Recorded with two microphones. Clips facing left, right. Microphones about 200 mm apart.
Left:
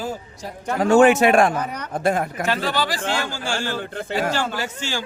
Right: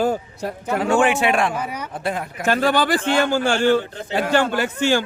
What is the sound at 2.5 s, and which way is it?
A man's voice, 50° right (ahead or behind).